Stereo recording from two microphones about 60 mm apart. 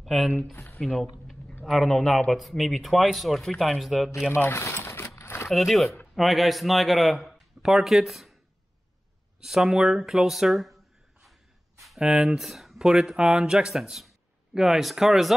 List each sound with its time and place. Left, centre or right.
0.0 s speech: centre
4.3 s speech: left
5.1 s a sound: left
5.5 s a man's voice: centre
9.4 s speech: centre
12.0 s speech: centre
13.7 s speech: centre